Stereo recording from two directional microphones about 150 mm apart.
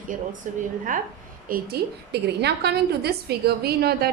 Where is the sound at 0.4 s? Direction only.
55° right (ahead or behind).